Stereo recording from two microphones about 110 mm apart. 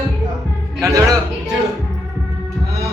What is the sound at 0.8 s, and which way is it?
Speech, 30° right (ahead or behind).